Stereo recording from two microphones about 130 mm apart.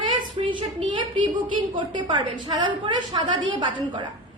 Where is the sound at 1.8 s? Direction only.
35° right (ahead or behind).